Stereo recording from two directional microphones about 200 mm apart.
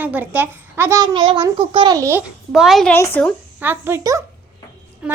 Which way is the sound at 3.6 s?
10° right (ahead or behind).